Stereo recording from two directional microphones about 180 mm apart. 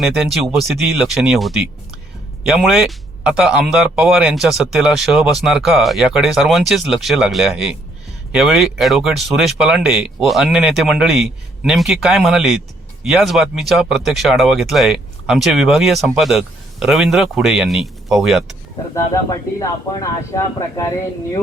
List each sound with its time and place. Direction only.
0.0 s speech: centre (ahead or behind)
18.9 s speech: 20° left (ahead or behind)